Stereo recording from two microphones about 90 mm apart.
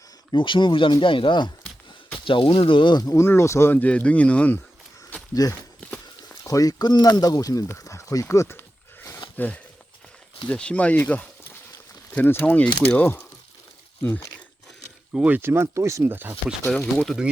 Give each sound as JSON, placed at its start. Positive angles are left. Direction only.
{"t": 0.3, "sound": "speech", "side_deg": 65}
{"t": 2.2, "sound": "speech", "side_deg": 70}
{"t": 3.0, "sound": "speech", "side_deg": 40}
{"t": 3.2, "sound": "speech", "side_deg": 30}
{"t": 5.3, "sound": "speech", "side_deg": 40}
{"t": 5.8, "sound": "walk", "side_deg": 10}
{"t": 6.4, "sound": "speech", "side_deg": 40}
{"t": 9.4, "sound": "speech", "side_deg": 20}
{"t": 15.1, "sound": "speech", "side_deg": -15}
{"t": 15.4, "sound": "speech", "side_deg": -25}
{"t": 16.0, "sound": "speech", "side_deg": -20}
{"t": 16.6, "sound": "speech", "side_deg": 5}